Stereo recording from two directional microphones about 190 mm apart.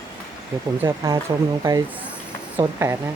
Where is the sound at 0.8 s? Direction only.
15° right (ahead or behind).